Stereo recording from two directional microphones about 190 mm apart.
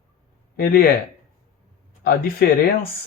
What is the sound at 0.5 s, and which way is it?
Speech, 50° left (ahead or behind).